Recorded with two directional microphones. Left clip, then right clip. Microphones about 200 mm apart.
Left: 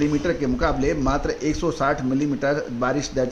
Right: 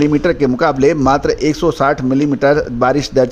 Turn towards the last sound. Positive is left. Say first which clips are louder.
# right 10 dB
turn(degrees=-45)  # may be behind; listen again after turning